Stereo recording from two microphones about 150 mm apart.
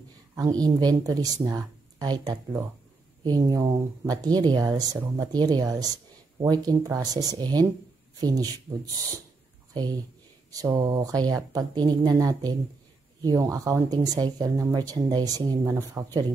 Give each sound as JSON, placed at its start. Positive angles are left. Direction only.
{"t": 0.4, "sound": "speech", "side_deg": -25}
{"t": 10.5, "sound": "speech", "side_deg": -25}